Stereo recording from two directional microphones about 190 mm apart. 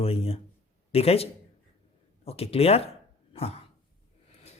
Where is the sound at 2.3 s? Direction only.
30° left (ahead or behind).